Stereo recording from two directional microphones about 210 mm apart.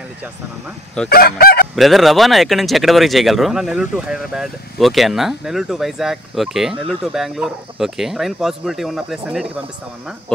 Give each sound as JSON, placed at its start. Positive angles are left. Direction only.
{"t": 1.0, "sound": "fowl", "side_deg": 45}
{"t": 1.8, "sound": "speech", "side_deg": 0}